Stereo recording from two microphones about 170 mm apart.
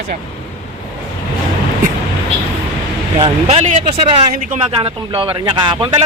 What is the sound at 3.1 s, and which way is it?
Speech, 35° right (ahead or behind).